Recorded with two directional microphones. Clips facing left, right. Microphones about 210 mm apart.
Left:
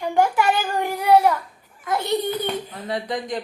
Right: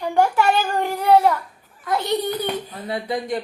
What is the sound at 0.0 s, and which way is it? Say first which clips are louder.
Child singing: right 1 dB; 15° left (ahead or behind).